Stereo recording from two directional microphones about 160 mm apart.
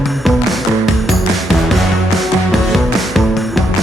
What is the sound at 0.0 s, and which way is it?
Music, centre (ahead or behind).